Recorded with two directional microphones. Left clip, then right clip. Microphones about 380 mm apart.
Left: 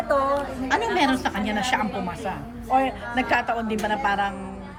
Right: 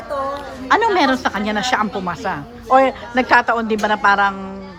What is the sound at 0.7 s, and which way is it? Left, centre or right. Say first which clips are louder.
A woman's voice: right 8 dB; centre.